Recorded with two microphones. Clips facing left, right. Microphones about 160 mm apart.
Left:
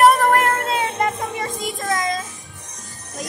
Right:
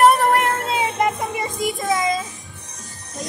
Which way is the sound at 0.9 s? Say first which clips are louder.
Right 1 dB; 15° right (ahead or behind).